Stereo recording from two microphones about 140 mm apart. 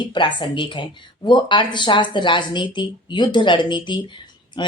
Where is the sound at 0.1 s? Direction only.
35° left (ahead or behind).